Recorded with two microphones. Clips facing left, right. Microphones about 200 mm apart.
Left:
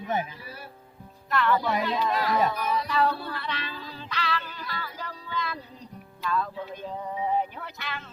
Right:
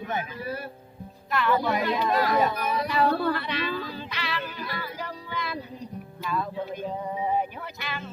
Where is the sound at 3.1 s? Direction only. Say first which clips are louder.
Right 7 dB; 65° right (ahead or behind).